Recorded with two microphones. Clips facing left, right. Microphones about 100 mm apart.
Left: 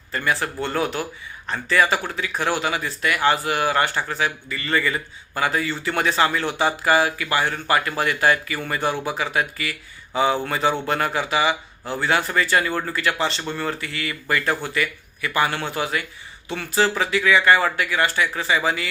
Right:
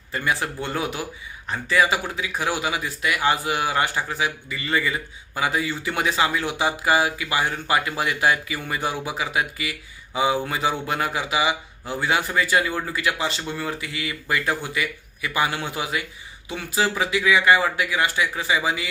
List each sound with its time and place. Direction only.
0.1 s speech: 15° right (ahead or behind)